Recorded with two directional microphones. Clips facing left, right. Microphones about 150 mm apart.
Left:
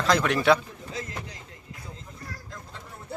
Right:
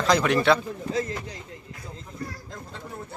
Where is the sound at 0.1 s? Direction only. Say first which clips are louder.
Right 1 dB; centre (ahead or behind).